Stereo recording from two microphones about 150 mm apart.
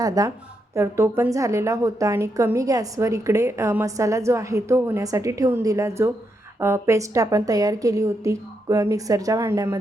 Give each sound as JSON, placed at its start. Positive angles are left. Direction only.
{"t": 0.0, "sound": "a woman's voice", "side_deg": -25}